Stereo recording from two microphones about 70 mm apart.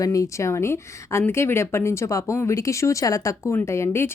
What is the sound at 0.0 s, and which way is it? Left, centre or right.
Speech, left.